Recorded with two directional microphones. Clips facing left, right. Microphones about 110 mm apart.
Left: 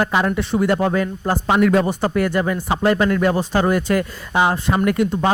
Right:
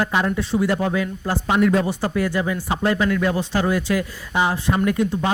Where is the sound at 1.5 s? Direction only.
70° left (ahead or behind).